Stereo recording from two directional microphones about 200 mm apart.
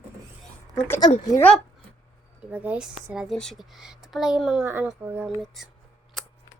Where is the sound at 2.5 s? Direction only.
5° right (ahead or behind).